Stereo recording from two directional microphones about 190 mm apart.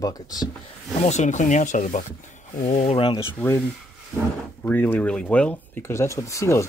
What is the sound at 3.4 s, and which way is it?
Speech, 10° left (ahead or behind).